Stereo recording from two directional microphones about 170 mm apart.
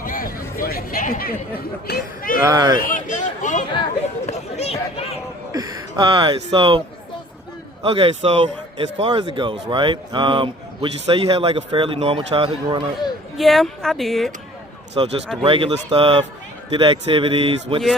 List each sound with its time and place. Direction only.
0.0 s chatter: 55° left (ahead or behind)
1.9 s speech: 55° left (ahead or behind)
2.5 s a man's voice: 20° right (ahead or behind)
2.7 s speech: 55° left (ahead or behind); by 5.1 s 35° left (ahead or behind)
5.5 s a man's voice: 20° right (ahead or behind)
13.3 s a woman's voice: centre (ahead or behind)
14.9 s a man's voice: 35° right (ahead or behind)